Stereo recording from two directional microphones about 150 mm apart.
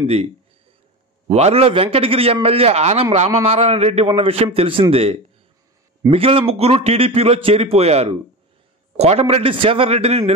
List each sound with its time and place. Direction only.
0.0 s speech: 45° right (ahead or behind)
1.3 s a man's voice: 40° right (ahead or behind)